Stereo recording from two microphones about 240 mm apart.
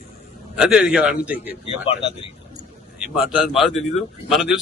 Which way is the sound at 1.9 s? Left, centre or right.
Left.